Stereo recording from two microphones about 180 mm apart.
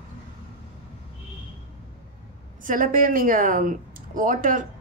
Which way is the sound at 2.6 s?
50° right (ahead or behind).